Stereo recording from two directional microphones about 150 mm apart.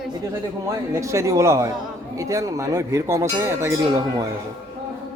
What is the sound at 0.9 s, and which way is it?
Speech, 20° right (ahead or behind).